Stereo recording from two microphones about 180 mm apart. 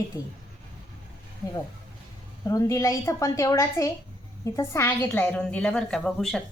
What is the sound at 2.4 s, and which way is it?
A woman's voice, 15° left (ahead or behind).